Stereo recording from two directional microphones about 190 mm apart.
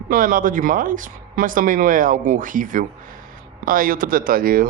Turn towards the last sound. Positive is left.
turn(degrees=-50)  # may be behind; listen again after turning